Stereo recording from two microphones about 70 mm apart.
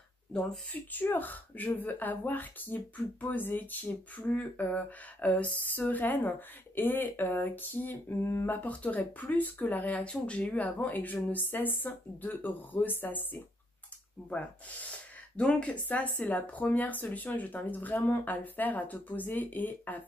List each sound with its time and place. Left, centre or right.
0.3 s speech: centre
0.9 s speech: left
15.3 s speech: centre